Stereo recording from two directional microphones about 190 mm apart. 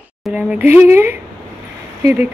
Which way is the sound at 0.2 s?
5° right (ahead or behind).